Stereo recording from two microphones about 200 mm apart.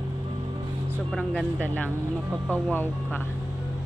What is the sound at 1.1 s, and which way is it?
Speech, 5° left (ahead or behind).